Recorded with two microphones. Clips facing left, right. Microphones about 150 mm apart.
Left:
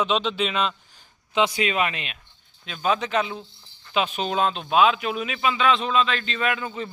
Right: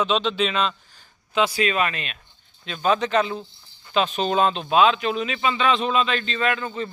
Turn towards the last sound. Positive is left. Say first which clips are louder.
# right 2 dB
turn(degrees=5)  # may be behind; listen again after turning